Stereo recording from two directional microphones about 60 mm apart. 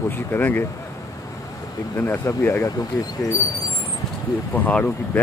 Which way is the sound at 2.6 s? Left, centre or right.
Left.